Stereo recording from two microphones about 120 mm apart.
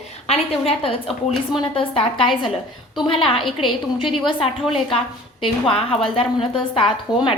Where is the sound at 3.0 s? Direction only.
50° left (ahead or behind).